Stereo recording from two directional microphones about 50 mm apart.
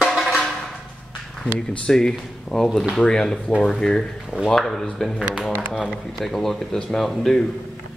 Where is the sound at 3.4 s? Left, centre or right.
Left.